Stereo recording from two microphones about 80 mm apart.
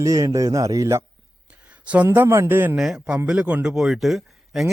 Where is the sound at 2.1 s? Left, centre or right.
Right.